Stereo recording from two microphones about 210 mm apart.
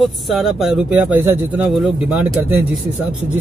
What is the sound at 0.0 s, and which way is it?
Speech, centre (ahead or behind).